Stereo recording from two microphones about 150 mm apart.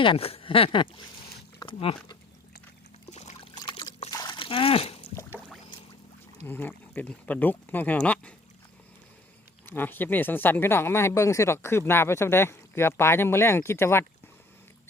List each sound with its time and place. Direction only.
0.0 s speech: 40° left (ahead or behind)
3.1 s a sound: 50° left (ahead or behind)
3.5 s trickle: 30° left (ahead or behind)
4.4 s a sound: 35° left (ahead or behind)
6.4 s speech: 15° left (ahead or behind)
9.6 s speech: 15° left (ahead or behind)